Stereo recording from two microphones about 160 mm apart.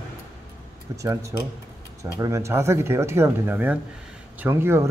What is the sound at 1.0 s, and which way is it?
Speech, 20° right (ahead or behind).